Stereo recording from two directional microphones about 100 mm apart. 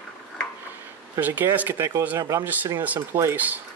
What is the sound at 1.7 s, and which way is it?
Speech, 30° right (ahead or behind).